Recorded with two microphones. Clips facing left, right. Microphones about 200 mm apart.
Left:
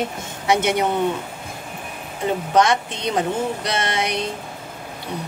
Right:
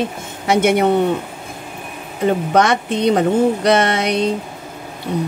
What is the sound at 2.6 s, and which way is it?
Speech, 60° right (ahead or behind).